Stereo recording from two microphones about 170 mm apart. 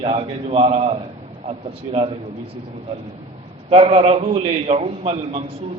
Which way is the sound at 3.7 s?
35° right (ahead or behind).